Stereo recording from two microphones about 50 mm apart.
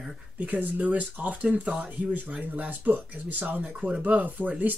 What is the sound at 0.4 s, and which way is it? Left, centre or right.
Speech, right.